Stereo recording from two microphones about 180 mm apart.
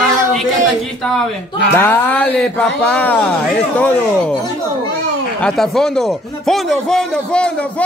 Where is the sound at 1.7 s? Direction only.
10° left (ahead or behind).